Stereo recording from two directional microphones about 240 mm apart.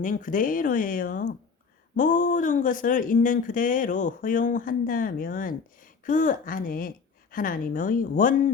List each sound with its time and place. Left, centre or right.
0.0 s speech: left